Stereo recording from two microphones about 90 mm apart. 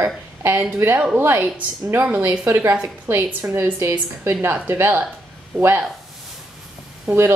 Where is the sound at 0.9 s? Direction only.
15° right (ahead or behind).